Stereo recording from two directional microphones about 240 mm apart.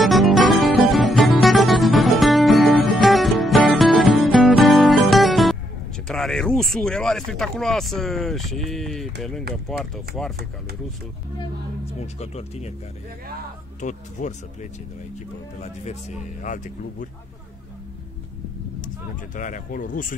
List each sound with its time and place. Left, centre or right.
0.0 s music: centre
6.0 s speech: centre
11.3 s speech: left
13.7 s speech: left
19.3 s speech: left